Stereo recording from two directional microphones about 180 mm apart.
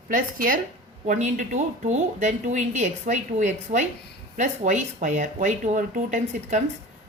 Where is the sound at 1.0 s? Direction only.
45° right (ahead or behind).